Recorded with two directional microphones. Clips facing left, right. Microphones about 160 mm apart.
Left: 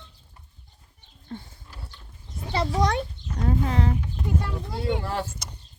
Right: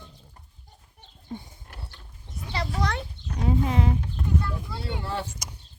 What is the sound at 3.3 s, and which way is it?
Chicken, 10° right (ahead or behind).